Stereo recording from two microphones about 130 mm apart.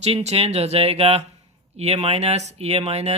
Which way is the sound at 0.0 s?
55° right (ahead or behind).